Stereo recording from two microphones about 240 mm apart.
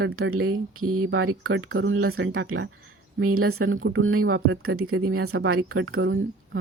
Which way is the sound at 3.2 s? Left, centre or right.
Right.